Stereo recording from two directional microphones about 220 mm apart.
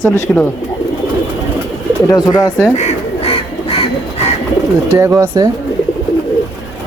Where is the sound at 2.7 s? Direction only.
30° left (ahead or behind).